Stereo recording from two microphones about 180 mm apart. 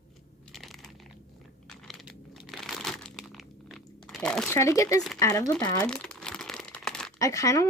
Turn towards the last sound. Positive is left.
turn(degrees=20)  # may be behind; listen again after turning